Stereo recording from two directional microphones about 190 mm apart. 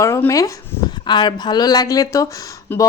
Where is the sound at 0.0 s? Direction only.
15° left (ahead or behind).